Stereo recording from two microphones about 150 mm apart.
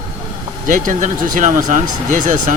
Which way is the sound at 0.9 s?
60° right (ahead or behind).